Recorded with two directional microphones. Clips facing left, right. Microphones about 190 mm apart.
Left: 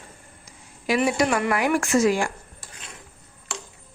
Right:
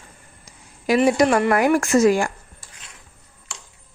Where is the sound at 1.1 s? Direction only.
40° right (ahead or behind).